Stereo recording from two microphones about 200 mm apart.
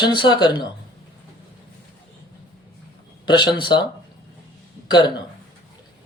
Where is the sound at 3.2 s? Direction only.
20° left (ahead or behind).